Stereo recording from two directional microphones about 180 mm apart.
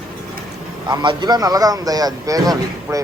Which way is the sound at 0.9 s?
25° right (ahead or behind).